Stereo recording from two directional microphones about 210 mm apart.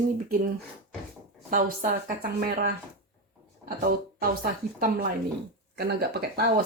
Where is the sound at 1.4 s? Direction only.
40° right (ahead or behind).